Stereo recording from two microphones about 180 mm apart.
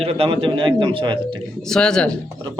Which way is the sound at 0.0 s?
30° right (ahead or behind).